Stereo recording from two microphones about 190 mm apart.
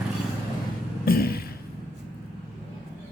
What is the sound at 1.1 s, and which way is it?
Beatboxing, 55° left (ahead or behind).